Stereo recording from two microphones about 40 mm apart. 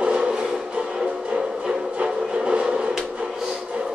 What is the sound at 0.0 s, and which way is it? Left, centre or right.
Music, right.